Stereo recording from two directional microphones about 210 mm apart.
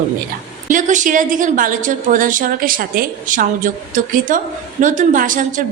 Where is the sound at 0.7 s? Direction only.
35° right (ahead or behind).